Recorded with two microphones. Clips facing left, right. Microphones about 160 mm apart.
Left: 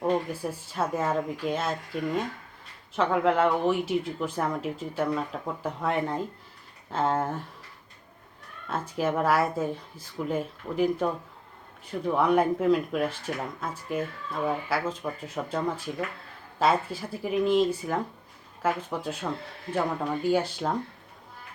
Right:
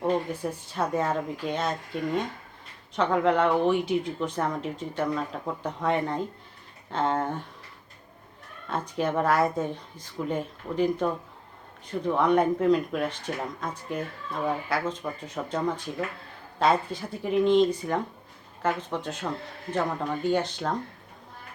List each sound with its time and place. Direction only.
0.7 s speech: 5° left (ahead or behind)
2.9 s speech: 5° left (ahead or behind)
8.7 s speech: 5° left (ahead or behind)